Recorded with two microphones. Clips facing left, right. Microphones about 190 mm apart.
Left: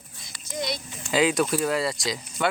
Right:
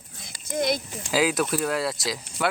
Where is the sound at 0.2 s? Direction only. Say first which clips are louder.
Right 5 dB; 50° right (ahead or behind).